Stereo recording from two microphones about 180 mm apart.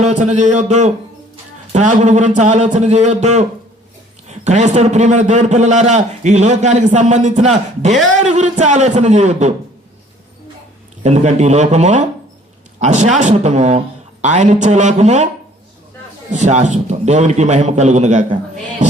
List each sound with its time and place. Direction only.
0.0 s a man's voice: 40° right (ahead or behind)
11.0 s a man's voice: 40° right (ahead or behind)
16.3 s a man's voice: 40° right (ahead or behind)
18.8 s music: 45° right (ahead or behind)